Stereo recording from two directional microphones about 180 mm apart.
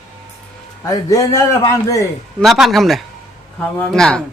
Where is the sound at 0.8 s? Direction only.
20° left (ahead or behind).